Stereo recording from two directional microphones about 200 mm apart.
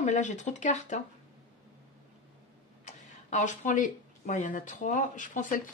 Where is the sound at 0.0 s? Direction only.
35° left (ahead or behind).